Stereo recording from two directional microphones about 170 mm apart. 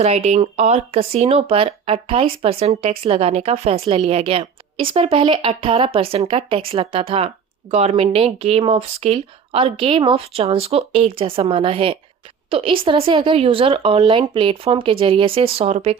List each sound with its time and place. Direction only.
0.0 s speech: 40° right (ahead or behind)